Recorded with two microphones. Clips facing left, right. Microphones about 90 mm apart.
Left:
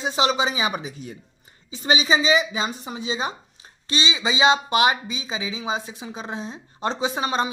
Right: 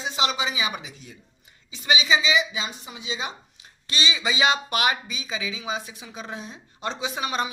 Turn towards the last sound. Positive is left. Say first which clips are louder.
# left 4 dB
turn(degrees=30)  # may be behind; listen again after turning